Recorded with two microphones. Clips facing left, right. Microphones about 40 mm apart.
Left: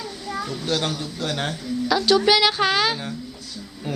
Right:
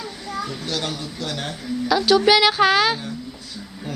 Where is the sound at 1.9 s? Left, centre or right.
Centre.